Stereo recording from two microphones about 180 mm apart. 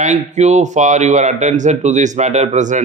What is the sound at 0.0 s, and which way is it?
Speech, 40° right (ahead or behind).